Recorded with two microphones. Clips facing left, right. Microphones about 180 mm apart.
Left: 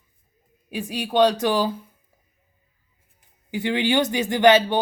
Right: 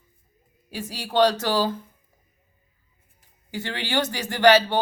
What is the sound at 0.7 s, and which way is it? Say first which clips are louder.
Speech: left 5 dB; 15° left (ahead or behind).